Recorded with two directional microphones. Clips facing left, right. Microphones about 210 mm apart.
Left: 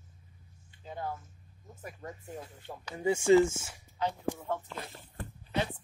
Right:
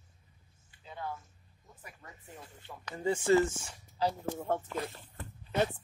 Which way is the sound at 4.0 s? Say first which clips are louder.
Right 2 dB; 35° right (ahead or behind).